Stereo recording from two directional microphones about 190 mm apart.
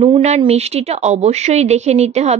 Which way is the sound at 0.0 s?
35° right (ahead or behind).